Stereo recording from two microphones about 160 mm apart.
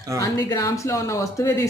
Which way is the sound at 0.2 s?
20° left (ahead or behind).